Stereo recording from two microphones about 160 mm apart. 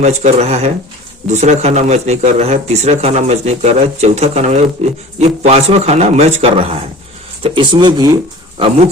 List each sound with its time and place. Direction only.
0.0 s speech: 45° right (ahead or behind)